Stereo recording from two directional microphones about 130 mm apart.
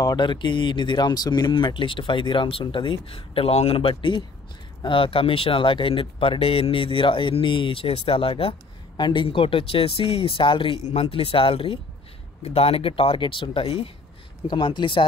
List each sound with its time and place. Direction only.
0.0 s speech: 35° left (ahead or behind)
10.8 s speech: 55° left (ahead or behind); by 15.0 s 40° left (ahead or behind)